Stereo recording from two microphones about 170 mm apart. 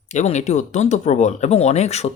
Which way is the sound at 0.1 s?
45° left (ahead or behind).